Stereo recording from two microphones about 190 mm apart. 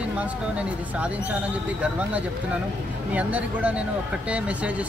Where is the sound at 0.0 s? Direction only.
5° right (ahead or behind).